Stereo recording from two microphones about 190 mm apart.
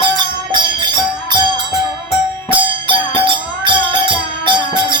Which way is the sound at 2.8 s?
25° right (ahead or behind).